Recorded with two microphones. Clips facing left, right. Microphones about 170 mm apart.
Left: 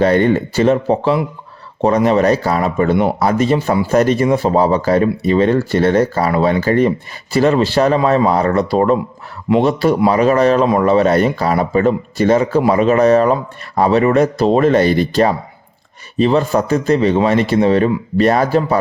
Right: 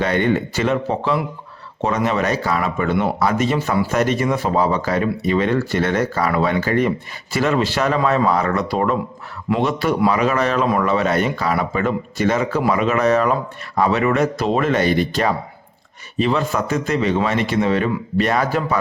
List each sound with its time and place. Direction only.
0.0 s speech: 35° left (ahead or behind)